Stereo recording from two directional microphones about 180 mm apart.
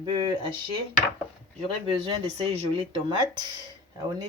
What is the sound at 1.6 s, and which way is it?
Speech, 35° right (ahead or behind).